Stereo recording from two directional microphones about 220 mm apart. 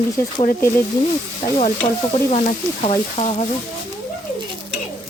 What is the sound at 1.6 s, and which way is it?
Frying, 30° left (ahead or behind).